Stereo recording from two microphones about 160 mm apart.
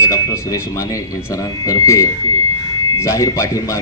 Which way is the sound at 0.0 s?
20° left (ahead or behind).